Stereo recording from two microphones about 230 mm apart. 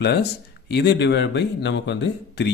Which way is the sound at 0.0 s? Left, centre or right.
Left.